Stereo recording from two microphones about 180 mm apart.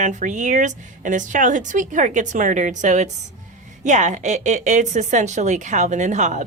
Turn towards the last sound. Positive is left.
turn(degrees=-40)  # may be behind; listen again after turning